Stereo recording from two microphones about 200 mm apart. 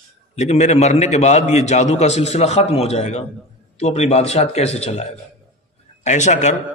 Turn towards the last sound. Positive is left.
turn(degrees=35)  # may be behind; listen again after turning